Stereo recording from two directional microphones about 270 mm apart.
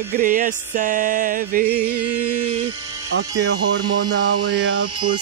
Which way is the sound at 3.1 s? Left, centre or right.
Right.